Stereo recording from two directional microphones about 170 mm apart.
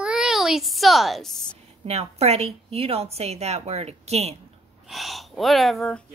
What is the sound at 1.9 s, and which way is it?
A woman's voice, 40° right (ahead or behind).